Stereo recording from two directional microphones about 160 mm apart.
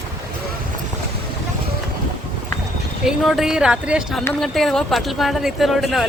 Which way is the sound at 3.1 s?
Centre (ahead or behind).